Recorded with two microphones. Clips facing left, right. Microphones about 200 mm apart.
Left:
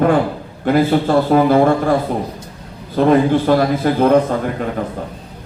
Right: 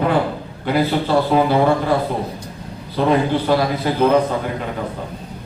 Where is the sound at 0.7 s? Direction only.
45° left (ahead or behind).